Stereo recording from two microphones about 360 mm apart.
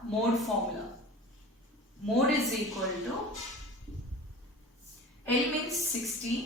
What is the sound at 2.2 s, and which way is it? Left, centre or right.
Speech, centre.